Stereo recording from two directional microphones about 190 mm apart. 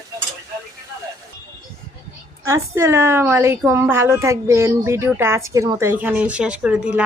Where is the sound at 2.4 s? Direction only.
15° right (ahead or behind).